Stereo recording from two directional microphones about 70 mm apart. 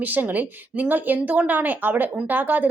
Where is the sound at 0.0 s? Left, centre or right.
Right.